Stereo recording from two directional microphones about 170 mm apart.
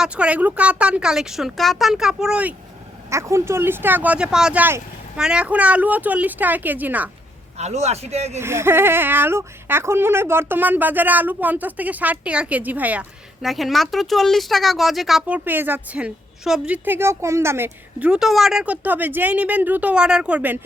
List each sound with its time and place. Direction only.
0.0 s speech: 5° right (ahead or behind)
7.5 s a man's voice: 40° right (ahead or behind)
8.4 s speech: 15° right (ahead or behind)